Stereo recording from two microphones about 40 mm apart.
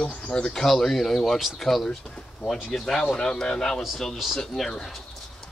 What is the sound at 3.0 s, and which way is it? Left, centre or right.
Speech, left.